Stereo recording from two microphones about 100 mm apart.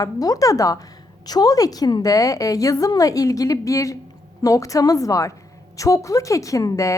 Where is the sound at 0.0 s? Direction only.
35° left (ahead or behind).